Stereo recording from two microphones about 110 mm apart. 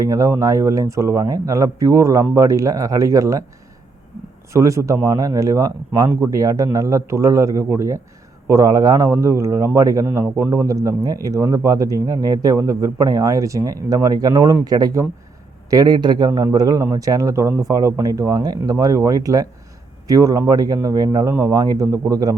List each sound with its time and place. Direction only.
0.0 s a man's voice: 30° right (ahead or behind)
4.5 s a man's voice: 25° right (ahead or behind)
21.2 s speech: 25° right (ahead or behind)
21.5 s a man's voice: 35° right (ahead or behind)